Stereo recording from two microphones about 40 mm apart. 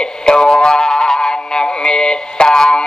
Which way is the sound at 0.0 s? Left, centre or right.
Centre.